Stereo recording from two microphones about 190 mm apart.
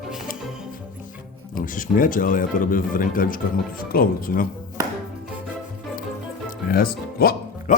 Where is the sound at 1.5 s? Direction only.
45° left (ahead or behind).